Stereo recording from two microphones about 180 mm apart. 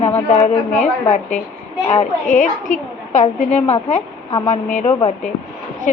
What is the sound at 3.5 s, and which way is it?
A woman's voice, 35° left (ahead or behind).